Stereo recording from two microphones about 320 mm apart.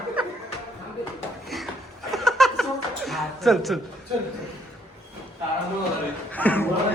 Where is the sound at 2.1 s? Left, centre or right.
Centre.